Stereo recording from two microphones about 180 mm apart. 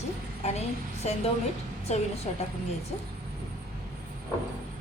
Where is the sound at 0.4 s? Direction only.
35° left (ahead or behind).